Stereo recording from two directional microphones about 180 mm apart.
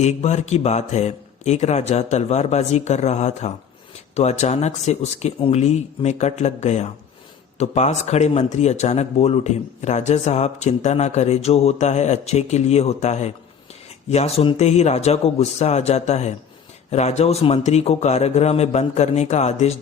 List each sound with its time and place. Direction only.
0.0 s speech: 40° left (ahead or behind)